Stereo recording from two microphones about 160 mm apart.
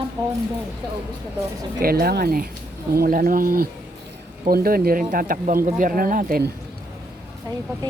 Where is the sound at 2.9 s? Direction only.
65° right (ahead or behind).